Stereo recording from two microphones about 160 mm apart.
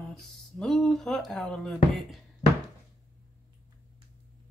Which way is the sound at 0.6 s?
5° left (ahead or behind).